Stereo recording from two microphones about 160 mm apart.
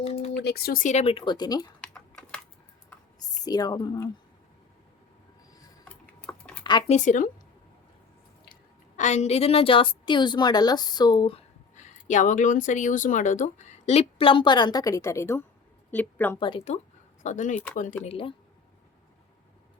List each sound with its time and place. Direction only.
0.0 s a sound: 40° left (ahead or behind)
0.3 s speech: 85° left; by 1.6 s 25° left (ahead or behind)
1.8 s typing: 5° left (ahead or behind)
3.4 s a woman's voice: 25° left (ahead or behind)
5.9 s a sound: 10° left (ahead or behind)
6.8 s speech: 50° left (ahead or behind)
9.0 s a woman's voice: 45° left (ahead or behind); by 11.4 s 30° left (ahead or behind)
11.7 s a woman's voice: 50° left (ahead or behind); by 16.4 s 10° left (ahead or behind)
16.4 s a woman's voice: 35° left (ahead or behind)
17.2 s speech: 50° left (ahead or behind)
18.0 s a woman's voice: 35° left (ahead or behind)